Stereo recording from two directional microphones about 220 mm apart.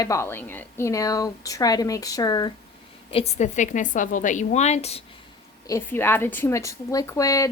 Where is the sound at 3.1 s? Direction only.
30° left (ahead or behind).